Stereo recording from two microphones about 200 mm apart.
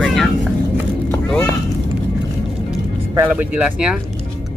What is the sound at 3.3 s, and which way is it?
Speech, 5° right (ahead or behind).